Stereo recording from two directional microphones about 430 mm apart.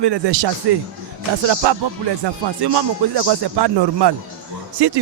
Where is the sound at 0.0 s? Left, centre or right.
Right.